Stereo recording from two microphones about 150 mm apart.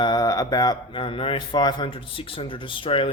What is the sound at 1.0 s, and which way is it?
A man's voice, 40° left (ahead or behind).